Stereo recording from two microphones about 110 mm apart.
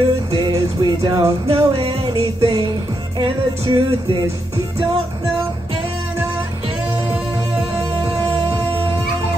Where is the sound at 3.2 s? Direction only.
45° right (ahead or behind).